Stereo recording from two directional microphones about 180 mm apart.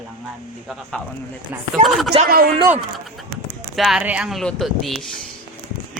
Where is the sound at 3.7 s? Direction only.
Centre (ahead or behind).